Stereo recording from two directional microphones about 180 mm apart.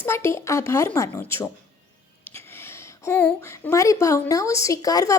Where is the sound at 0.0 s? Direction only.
15° left (ahead or behind).